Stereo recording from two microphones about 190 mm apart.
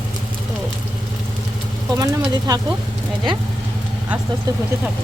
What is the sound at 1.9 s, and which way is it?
Speech, 20° right (ahead or behind).